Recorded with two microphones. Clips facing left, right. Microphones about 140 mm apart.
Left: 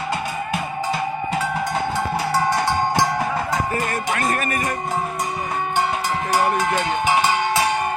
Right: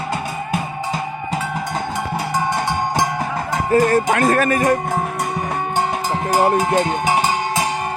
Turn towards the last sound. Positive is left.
turn(degrees=-40)  # may be behind; listen again after turning